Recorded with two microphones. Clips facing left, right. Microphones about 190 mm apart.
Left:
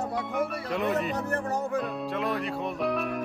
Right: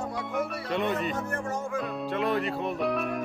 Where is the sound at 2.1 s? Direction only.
Centre (ahead or behind).